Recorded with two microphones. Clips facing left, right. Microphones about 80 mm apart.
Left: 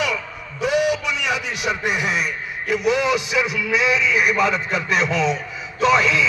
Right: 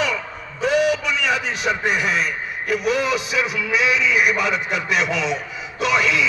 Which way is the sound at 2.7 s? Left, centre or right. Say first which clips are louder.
Left 2 dB; left.